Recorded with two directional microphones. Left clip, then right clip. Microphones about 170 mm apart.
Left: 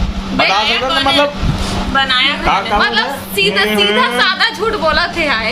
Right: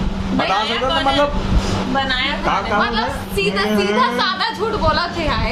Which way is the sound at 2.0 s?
30° right (ahead or behind).